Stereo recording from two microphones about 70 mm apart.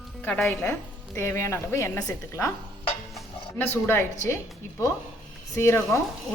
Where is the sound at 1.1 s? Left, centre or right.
Left.